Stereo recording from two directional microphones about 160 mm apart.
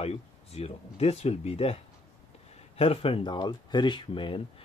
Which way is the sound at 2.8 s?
35° left (ahead or behind).